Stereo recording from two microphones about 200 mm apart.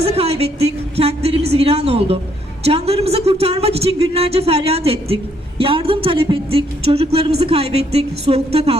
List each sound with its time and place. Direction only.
0.0 s a woman's voice: 30° right (ahead or behind)